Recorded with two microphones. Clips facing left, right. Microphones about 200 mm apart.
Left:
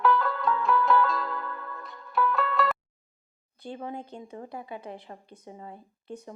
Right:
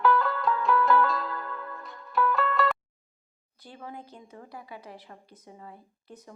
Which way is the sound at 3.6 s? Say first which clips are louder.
Left 6 dB; 25° left (ahead or behind).